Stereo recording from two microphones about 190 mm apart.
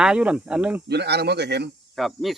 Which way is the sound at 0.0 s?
5° right (ahead or behind).